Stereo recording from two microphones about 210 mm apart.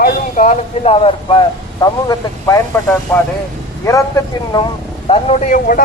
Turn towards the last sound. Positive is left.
turn(degrees=40)  # may be behind; listen again after turning